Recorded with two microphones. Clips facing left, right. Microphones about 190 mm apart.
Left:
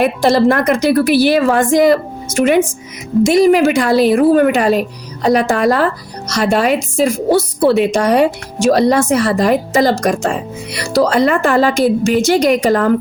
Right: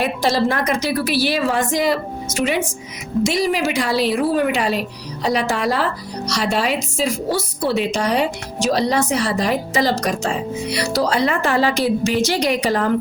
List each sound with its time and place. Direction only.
0.0 s a woman's voice: 55° left (ahead or behind)